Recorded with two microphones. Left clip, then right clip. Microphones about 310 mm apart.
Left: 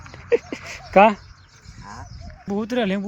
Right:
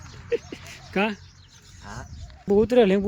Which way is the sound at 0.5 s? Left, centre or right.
Centre.